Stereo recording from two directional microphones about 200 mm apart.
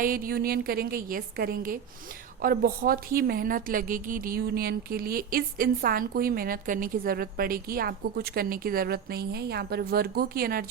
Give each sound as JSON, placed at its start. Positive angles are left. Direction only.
{"t": 0.0, "sound": "a woman's voice", "side_deg": -45}